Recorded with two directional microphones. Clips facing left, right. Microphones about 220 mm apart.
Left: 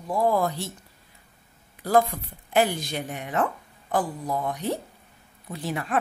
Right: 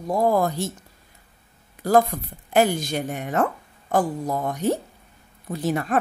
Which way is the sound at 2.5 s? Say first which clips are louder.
Right 4 dB; 45° right (ahead or behind).